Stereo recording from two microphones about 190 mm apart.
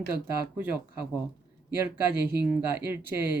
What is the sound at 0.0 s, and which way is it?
Speech, 50° right (ahead or behind).